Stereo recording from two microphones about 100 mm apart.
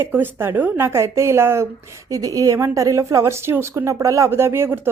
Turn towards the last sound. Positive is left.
turn(degrees=-25)  # may be behind; listen again after turning